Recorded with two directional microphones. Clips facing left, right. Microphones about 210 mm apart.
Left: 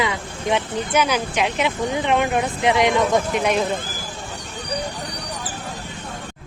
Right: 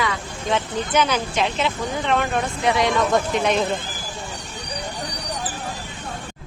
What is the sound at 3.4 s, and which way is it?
Speech, 10° left (ahead or behind).